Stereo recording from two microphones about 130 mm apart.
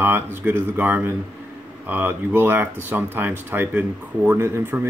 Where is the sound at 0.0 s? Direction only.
15° right (ahead or behind).